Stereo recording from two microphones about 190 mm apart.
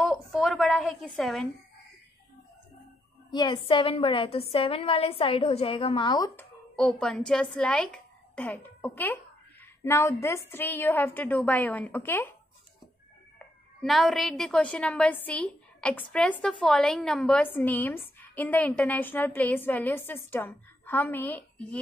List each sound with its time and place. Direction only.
0.0 s a sound: centre (ahead or behind)
3.3 s a woman's voice: 25° left (ahead or behind)
6.3 s a woman's voice: 5° left (ahead or behind)
13.8 s a woman's voice: centre (ahead or behind)